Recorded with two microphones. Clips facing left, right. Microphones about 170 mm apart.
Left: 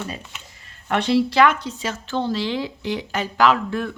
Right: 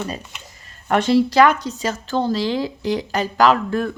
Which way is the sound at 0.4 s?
40° right (ahead or behind).